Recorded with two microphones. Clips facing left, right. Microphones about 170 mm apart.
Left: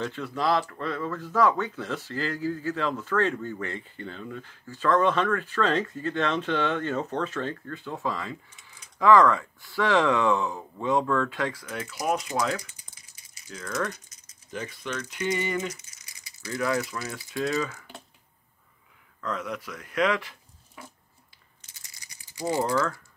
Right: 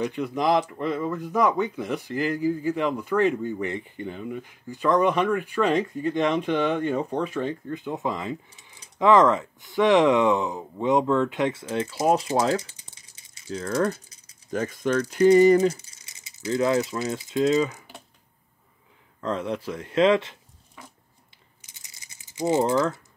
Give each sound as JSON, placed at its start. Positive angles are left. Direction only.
{"t": 0.0, "sound": "speech", "side_deg": -15}
{"t": 14.5, "sound": "speech", "side_deg": -45}
{"t": 19.2, "sound": "speech", "side_deg": -30}
{"t": 21.5, "sound": "rattle", "side_deg": -15}